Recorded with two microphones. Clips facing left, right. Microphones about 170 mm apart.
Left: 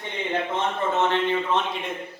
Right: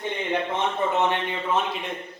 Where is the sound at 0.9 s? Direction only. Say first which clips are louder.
Left 2 dB; 15° right (ahead or behind).